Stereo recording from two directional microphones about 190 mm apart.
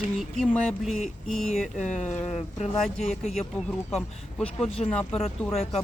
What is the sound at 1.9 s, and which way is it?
Speech, 40° left (ahead or behind).